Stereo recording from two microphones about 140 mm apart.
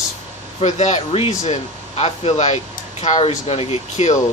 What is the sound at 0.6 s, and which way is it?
Speech, 55° left (ahead or behind).